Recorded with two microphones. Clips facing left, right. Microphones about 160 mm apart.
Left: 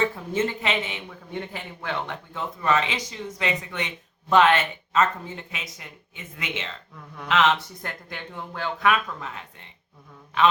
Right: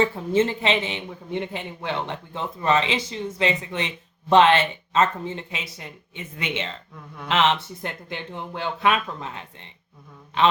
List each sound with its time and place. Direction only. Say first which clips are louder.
0.3 s a man's voice: right 5 dB; 30° right (ahead or behind)